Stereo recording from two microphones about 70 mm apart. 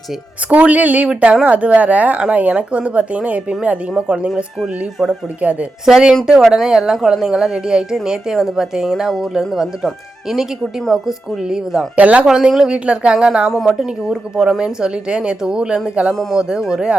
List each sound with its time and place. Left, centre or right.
0.5 s speech: right
5.4 s speech: centre
11.9 s speech: right
12.2 s speech: centre